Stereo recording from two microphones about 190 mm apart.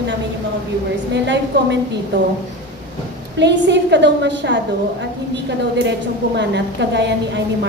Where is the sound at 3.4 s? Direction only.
65° right (ahead or behind).